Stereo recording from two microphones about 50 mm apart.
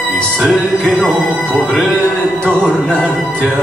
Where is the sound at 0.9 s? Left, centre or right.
Centre.